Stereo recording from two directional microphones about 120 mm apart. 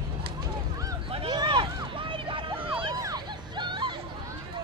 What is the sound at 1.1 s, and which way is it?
Vehicle, 40° right (ahead or behind).